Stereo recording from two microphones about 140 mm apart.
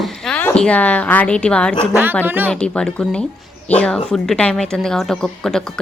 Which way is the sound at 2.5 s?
5° left (ahead or behind).